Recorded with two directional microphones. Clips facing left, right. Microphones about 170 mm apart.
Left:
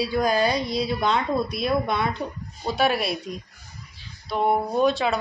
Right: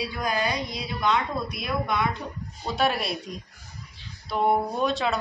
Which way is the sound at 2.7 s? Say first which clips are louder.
Left 3 dB; 5° left (ahead or behind).